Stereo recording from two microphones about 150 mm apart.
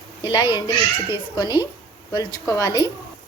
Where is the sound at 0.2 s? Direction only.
30° left (ahead or behind).